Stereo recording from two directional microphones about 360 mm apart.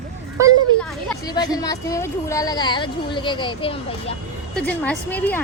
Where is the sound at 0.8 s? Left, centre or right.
Centre.